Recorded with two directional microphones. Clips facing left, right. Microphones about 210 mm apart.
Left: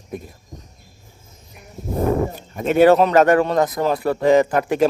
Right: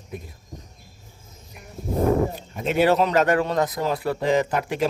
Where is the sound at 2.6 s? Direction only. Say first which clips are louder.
Left 6 dB; 50° left (ahead or behind).